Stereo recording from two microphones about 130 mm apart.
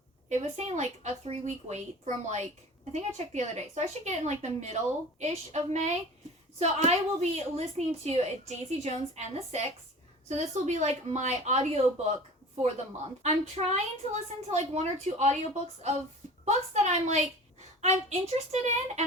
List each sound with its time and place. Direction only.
0.3 s a woman's voice: 60° right (ahead or behind)
13.2 s a woman's voice: 60° right (ahead or behind)
16.5 s a woman's voice: 60° right (ahead or behind)